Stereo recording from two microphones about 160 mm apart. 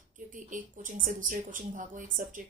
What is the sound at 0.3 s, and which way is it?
Speech, 55° right (ahead or behind).